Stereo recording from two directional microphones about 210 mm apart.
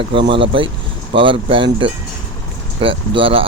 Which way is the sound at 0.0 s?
25° right (ahead or behind).